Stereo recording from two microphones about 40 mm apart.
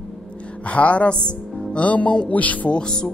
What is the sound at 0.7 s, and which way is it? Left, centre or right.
Speech, left.